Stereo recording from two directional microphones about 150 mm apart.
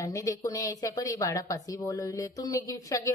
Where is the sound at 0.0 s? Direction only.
20° left (ahead or behind).